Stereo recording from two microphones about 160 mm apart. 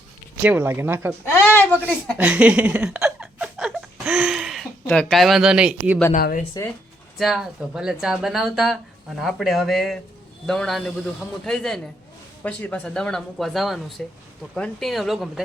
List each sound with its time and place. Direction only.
0.4 s speech: 10° right (ahead or behind)
1.2 s speech: 15° left (ahead or behind)
2.1 s a sound: 10° right (ahead or behind)
4.9 s speech: 5° left (ahead or behind)
6.1 s speech: 60° left (ahead or behind)
7.2 s speech: centre (ahead or behind)